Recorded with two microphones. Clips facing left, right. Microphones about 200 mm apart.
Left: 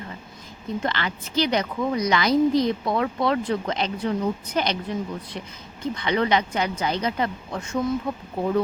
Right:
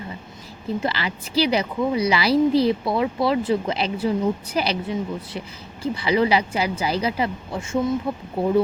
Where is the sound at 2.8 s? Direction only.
5° right (ahead or behind).